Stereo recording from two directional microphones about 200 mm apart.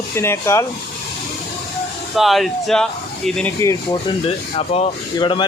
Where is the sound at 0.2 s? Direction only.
15° left (ahead or behind).